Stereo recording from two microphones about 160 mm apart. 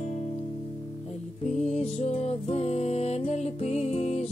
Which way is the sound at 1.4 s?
40° left (ahead or behind).